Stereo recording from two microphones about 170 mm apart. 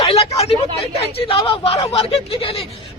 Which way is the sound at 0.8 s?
35° left (ahead or behind).